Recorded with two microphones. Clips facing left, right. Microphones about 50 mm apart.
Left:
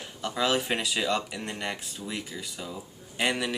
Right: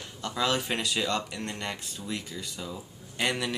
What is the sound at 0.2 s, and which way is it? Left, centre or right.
Speech, centre.